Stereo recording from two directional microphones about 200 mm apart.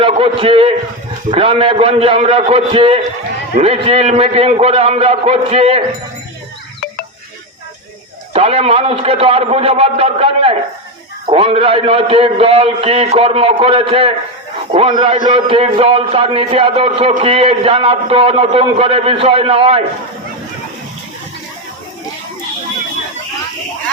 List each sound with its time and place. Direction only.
0.0 s a man's voice: 30° right (ahead or behind)
8.3 s a man's voice: 30° right (ahead or behind)